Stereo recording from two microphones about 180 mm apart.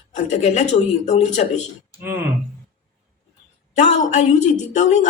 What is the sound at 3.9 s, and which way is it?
A woman's voice, 40° left (ahead or behind).